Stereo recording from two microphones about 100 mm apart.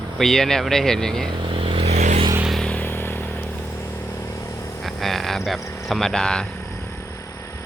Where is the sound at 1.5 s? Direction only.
60° right (ahead or behind); by 2.3 s 75° right (ahead or behind).